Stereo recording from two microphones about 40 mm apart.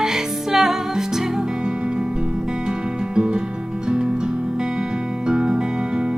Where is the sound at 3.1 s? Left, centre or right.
Right.